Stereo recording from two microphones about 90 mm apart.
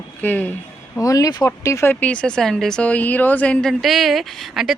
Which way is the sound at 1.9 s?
15° left (ahead or behind).